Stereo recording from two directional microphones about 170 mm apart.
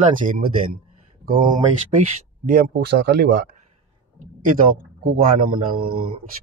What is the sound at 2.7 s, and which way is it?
Speech, 70° right (ahead or behind).